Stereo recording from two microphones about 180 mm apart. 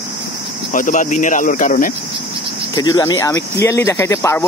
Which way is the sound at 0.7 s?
45° left (ahead or behind).